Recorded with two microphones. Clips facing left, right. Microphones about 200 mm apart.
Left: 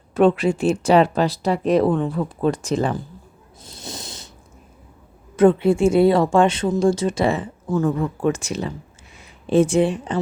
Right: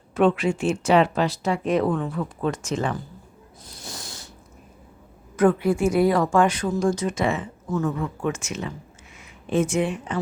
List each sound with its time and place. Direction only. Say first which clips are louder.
0.1 s speech: left 4 dB; 35° left (ahead or behind)
3.6 s a sound: left 5 dB; 25° left (ahead or behind)
5.4 s a woman's voice: left 5 dB; 25° left (ahead or behind)